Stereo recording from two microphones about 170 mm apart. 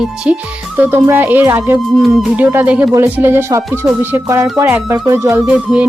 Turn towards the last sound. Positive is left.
turn(degrees=-10)  # may be behind; listen again after turning